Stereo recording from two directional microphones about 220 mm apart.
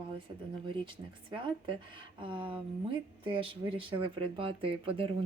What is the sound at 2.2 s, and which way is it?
Speech, 25° right (ahead or behind).